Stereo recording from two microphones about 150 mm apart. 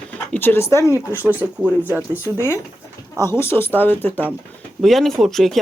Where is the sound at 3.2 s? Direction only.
15° left (ahead or behind).